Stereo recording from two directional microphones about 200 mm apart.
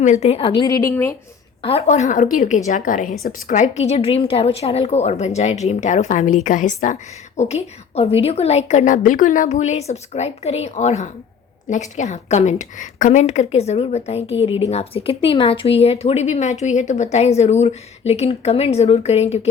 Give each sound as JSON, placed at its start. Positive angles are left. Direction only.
{"t": 0.0, "sound": "a woman's voice", "side_deg": 35}
{"t": 1.6, "sound": "speech", "side_deg": 30}